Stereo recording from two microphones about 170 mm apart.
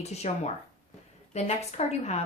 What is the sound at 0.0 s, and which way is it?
A woman's voice, 40° left (ahead or behind).